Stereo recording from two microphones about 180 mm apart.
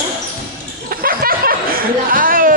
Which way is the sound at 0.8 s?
55° right (ahead or behind).